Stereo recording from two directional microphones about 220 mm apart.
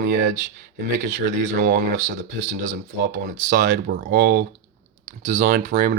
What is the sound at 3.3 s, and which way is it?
Speech, 35° right (ahead or behind).